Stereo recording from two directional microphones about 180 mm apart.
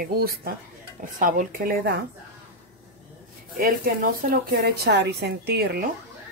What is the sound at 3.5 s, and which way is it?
Speech, 50° right (ahead or behind).